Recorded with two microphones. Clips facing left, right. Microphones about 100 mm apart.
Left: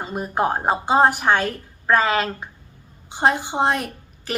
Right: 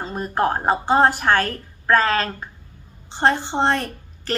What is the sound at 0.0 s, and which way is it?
A woman's voice, 10° left (ahead or behind).